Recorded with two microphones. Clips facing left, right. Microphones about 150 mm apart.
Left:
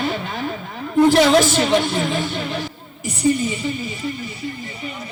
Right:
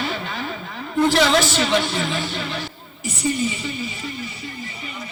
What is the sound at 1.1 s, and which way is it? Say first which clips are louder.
A man's voice: left 4 dB; 50° left (ahead or behind).